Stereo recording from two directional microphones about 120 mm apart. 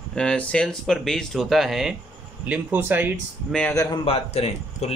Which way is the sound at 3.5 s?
10° left (ahead or behind).